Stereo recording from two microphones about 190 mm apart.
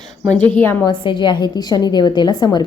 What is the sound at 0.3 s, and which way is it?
Speech, 10° left (ahead or behind).